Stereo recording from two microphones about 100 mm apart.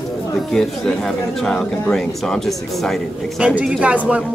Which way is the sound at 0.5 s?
5° left (ahead or behind).